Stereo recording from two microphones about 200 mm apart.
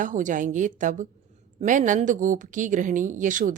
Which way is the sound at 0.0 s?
40° right (ahead or behind).